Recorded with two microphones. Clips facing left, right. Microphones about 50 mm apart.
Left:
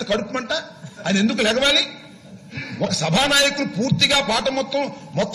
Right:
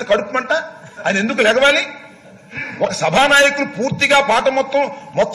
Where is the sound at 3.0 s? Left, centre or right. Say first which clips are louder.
Right 7 dB; right.